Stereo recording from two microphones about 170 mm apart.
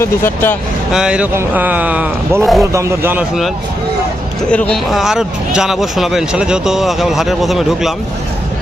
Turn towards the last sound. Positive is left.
turn(degrees=0)  # may be behind; listen again after turning